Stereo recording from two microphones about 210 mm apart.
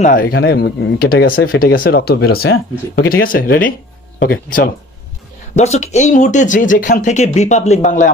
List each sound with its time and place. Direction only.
0.0 s speech: 40° left (ahead or behind)
5.6 s speech: 30° left (ahead or behind)